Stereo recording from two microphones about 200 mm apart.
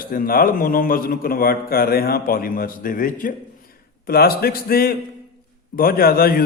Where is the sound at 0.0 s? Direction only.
45° left (ahead or behind).